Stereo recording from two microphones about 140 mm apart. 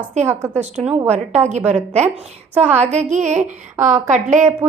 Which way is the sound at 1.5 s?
55° right (ahead or behind).